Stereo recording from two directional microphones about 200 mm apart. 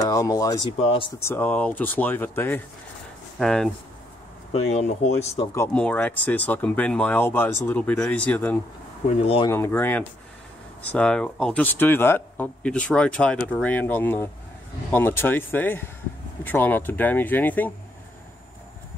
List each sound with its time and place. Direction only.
0.0 s speech: 15° left (ahead or behind)
0.7 s speech: 30° left (ahead or behind)
1.2 s speech: 10° left (ahead or behind)
4.5 s speech: 30° left (ahead or behind)
5.5 s speech: 10° left (ahead or behind)
9.2 s speech: 30° left (ahead or behind)
9.5 s speech: 10° left (ahead or behind)